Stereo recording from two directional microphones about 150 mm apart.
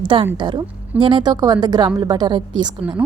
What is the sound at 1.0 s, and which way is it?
A woman's voice, 30° right (ahead or behind).